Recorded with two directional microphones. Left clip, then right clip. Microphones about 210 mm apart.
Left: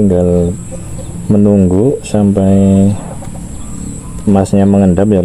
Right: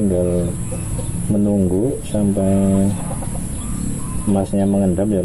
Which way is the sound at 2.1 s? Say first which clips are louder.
Left 6 dB; 65° left (ahead or behind).